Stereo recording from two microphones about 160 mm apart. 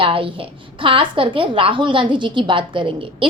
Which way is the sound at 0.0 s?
35° right (ahead or behind).